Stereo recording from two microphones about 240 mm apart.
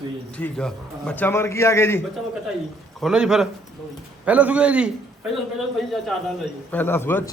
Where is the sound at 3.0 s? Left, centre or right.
Centre.